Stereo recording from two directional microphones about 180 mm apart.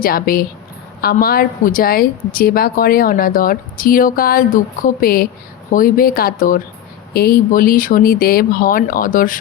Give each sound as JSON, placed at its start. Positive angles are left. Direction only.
{"t": 0.0, "sound": "speech", "side_deg": 55}